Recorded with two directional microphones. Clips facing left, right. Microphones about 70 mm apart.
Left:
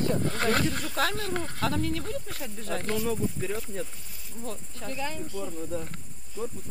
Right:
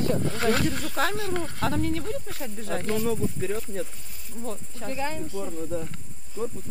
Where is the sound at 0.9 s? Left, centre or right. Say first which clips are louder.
Right 2 dB; centre.